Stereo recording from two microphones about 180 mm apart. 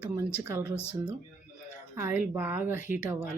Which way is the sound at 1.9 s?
10° right (ahead or behind).